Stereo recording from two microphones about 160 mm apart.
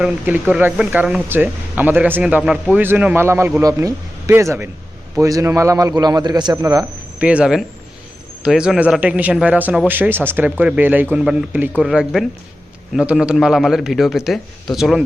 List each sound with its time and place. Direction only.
0.0 s a man's voice: 10° right (ahead or behind)
7.2 s a man's voice: 10° right (ahead or behind)